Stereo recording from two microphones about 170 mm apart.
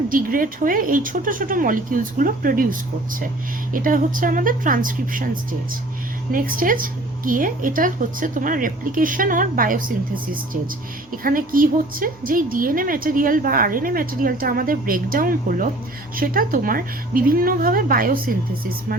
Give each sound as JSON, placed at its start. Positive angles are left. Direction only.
{"t": 0.1, "sound": "speech", "side_deg": -55}
{"t": 11.2, "sound": "a woman's voice", "side_deg": -55}